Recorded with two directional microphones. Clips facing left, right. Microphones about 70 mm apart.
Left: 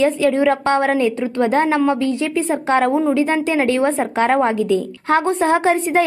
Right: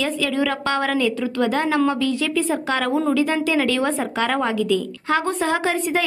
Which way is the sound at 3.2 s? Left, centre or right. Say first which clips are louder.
Left 3 dB; left.